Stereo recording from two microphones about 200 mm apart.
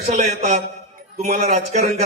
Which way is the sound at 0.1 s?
35° right (ahead or behind).